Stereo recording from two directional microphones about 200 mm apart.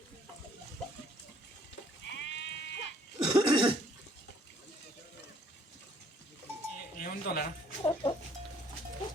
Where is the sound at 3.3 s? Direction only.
25° right (ahead or behind).